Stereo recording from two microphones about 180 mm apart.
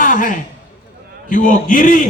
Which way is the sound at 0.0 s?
45° left (ahead or behind).